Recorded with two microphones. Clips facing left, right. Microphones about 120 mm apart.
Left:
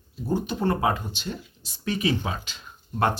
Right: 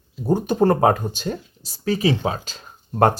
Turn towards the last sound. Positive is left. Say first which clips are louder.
# right 7 dB
turn(degrees=-45)  # may be behind; listen again after turning